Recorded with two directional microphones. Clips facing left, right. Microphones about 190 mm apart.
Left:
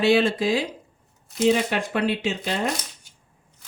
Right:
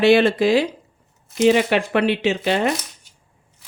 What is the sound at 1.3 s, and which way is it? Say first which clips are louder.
Speech: right 5 dB; 80° right.